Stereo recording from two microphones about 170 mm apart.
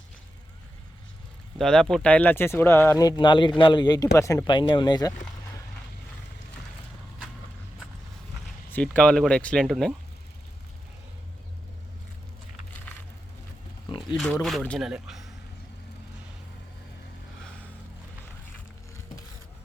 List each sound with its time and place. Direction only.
1.5 s speech: 5° left (ahead or behind)
4.4 s speech: 30° left (ahead or behind)
8.7 s speech: 5° left (ahead or behind)
14.4 s speech: 5° left (ahead or behind)